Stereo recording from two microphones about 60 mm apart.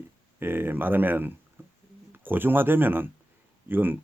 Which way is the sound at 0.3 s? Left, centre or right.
Right.